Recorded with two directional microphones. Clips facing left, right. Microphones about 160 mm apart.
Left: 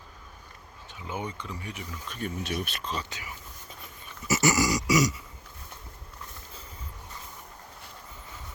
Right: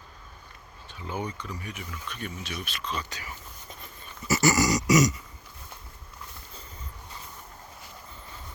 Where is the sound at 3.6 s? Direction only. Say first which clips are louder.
Right 2 dB; 10° left (ahead or behind).